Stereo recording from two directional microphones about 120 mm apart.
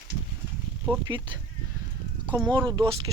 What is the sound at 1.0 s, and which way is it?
Speech, 40° right (ahead or behind).